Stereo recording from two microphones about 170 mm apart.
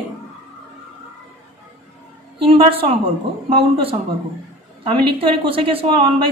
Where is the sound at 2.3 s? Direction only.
30° right (ahead or behind).